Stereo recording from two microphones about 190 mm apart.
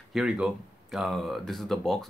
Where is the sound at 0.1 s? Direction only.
Centre (ahead or behind).